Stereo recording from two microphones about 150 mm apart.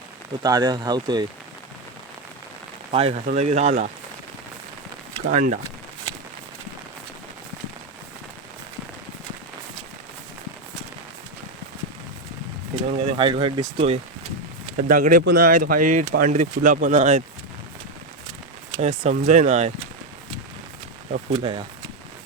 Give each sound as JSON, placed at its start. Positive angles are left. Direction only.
{"t": 0.4, "sound": "speech", "side_deg": -30}
{"t": 2.9, "sound": "speech", "side_deg": -40}
{"t": 5.3, "sound": "speech", "side_deg": -55}
{"t": 12.7, "sound": "speech", "side_deg": -40}
{"t": 14.7, "sound": "speech", "side_deg": -65}
{"t": 18.8, "sound": "speech", "side_deg": -50}
{"t": 21.1, "sound": "speech", "side_deg": -40}